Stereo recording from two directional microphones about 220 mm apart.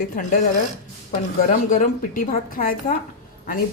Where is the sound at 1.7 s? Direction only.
40° left (ahead or behind).